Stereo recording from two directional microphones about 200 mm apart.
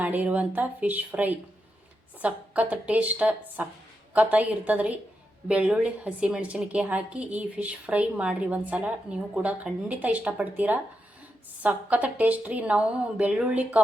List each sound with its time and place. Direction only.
0.0 s a woman's voice: 10° right (ahead or behind)